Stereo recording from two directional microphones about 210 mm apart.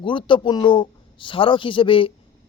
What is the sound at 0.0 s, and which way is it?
A man's voice, 25° left (ahead or behind).